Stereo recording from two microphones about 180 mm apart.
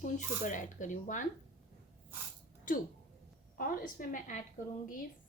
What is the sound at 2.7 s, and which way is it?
A woman's voice, 50° left (ahead or behind).